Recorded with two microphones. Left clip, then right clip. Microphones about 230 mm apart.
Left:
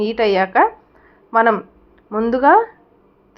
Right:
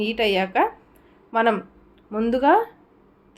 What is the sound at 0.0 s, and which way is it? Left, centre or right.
A woman's voice, centre.